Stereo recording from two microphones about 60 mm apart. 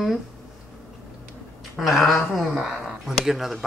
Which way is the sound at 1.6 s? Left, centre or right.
Centre.